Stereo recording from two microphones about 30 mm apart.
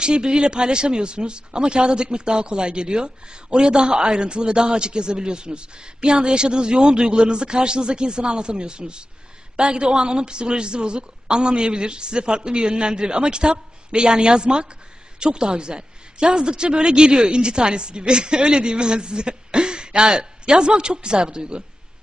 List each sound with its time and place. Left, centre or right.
0.0 s a woman's voice: right